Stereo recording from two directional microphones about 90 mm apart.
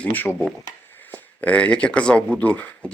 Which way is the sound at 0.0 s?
20° left (ahead or behind).